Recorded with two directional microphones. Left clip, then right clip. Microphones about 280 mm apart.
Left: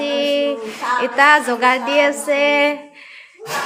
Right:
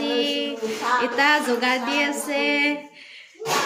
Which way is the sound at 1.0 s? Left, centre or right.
Centre.